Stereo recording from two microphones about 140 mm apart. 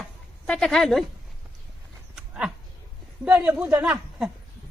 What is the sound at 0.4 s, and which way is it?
Speech, 5° left (ahead or behind).